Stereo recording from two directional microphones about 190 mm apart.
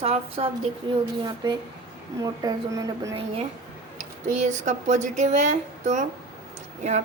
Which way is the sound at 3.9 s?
40° right (ahead or behind).